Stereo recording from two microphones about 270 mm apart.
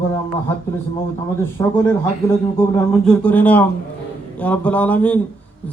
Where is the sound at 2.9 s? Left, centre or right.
Centre.